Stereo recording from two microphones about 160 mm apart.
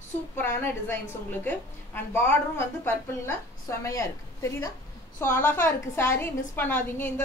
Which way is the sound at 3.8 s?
20° left (ahead or behind).